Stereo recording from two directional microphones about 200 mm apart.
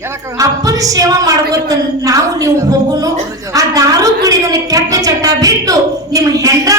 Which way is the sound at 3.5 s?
15° right (ahead or behind).